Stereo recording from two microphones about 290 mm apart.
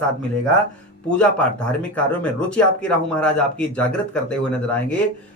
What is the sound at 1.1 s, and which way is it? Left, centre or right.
Speech, centre.